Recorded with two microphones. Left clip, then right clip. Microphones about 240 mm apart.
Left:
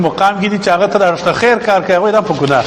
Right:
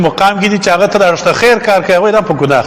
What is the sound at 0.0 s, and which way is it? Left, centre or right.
A man's voice, right.